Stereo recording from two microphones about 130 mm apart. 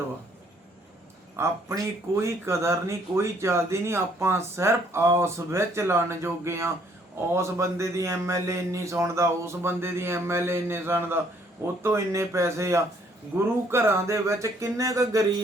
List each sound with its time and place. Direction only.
1.4 s speech: 20° right (ahead or behind)